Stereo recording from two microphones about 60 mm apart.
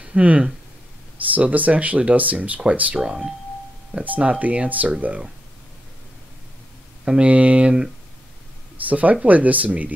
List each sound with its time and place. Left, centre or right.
0.0 s speech: right
3.0 s speech: centre
4.0 s speech: right
7.1 s speech: right